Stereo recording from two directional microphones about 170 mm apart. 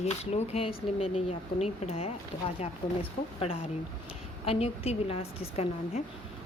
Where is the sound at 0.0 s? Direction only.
40° left (ahead or behind).